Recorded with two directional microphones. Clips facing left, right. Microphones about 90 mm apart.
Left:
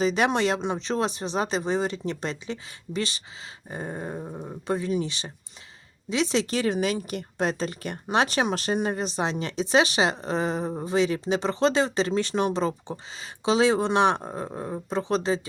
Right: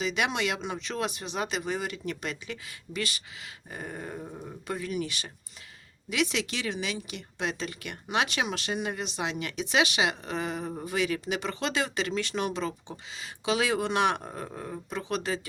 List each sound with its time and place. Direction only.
0.0 s speech: 35° left (ahead or behind)